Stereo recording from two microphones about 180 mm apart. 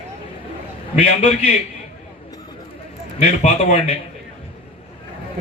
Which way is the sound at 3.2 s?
35° left (ahead or behind).